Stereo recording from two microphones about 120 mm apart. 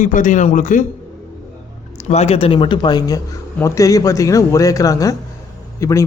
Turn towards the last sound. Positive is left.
turn(degrees=25)  # may be behind; listen again after turning